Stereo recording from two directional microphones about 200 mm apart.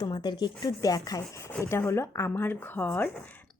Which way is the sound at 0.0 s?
20° left (ahead or behind).